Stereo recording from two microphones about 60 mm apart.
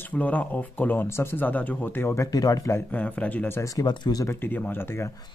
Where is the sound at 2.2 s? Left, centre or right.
Left.